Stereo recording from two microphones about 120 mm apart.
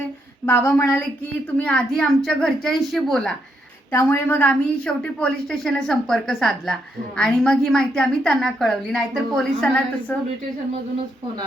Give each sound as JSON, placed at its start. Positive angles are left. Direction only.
{"t": 0.4, "sound": "a woman's voice", "side_deg": 20}
{"t": 1.5, "sound": "a woman's voice", "side_deg": 10}
{"t": 3.9, "sound": "a woman's voice", "side_deg": 20}